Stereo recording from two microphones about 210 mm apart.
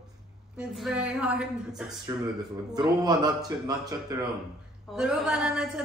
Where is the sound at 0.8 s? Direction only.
5° right (ahead or behind).